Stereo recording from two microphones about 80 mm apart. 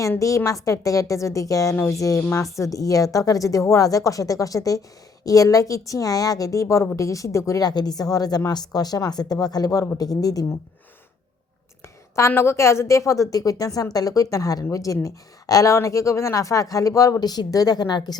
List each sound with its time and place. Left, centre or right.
0.2 s a woman's voice: left
7.7 s a woman's voice: left
12.3 s a woman's voice: left
17.2 s speech: left